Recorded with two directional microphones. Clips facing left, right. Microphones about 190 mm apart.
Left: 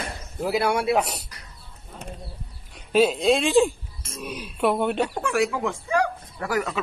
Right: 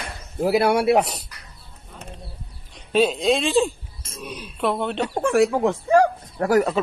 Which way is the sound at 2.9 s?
5° left (ahead or behind).